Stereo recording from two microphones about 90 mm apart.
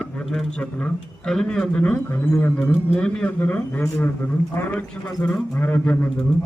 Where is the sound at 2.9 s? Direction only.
10° left (ahead or behind).